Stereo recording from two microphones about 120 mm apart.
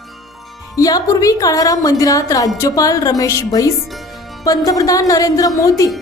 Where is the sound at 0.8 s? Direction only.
30° left (ahead or behind).